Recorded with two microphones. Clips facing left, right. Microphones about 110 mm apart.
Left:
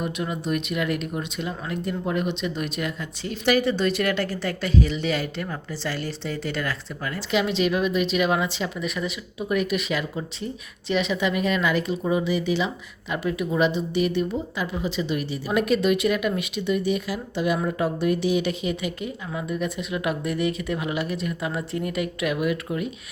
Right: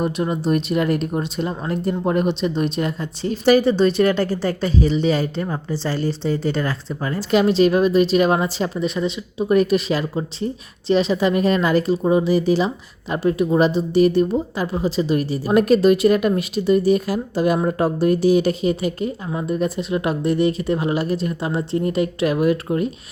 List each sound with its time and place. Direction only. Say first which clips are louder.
0.0 s speech: right 7 dB; 35° right (ahead or behind)
7.2 s speech: right 8 dB; 40° right (ahead or behind)